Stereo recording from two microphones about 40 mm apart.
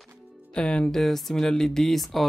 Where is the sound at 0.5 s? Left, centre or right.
Left.